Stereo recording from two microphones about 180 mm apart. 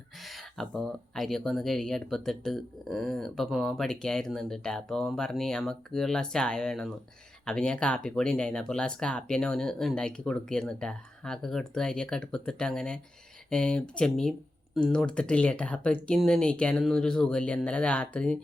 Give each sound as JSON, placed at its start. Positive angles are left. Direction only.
{"t": 0.3, "sound": "speech", "side_deg": 0}